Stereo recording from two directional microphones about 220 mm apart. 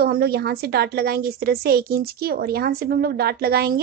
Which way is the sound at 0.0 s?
45° right (ahead or behind).